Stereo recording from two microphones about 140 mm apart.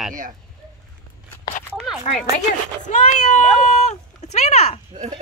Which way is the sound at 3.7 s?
55° left (ahead or behind).